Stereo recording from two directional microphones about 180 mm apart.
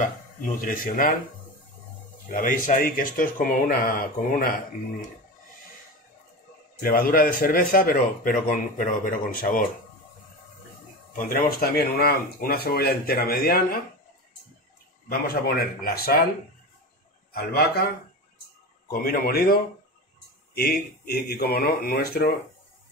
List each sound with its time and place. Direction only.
0.6 s a man's voice: 50° left (ahead or behind)
2.3 s a man's voice: 50° left (ahead or behind)
6.8 s a man's voice: 50° left (ahead or behind)
11.1 s speech: 50° left (ahead or behind)
15.0 s speech: 60° left (ahead or behind)
17.3 s speech: 55° left (ahead or behind)
18.9 s speech: 55° left (ahead or behind)